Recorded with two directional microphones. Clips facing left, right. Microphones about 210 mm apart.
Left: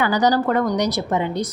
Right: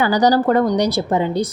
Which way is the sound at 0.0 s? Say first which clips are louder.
Right 3 dB; 35° right (ahead or behind).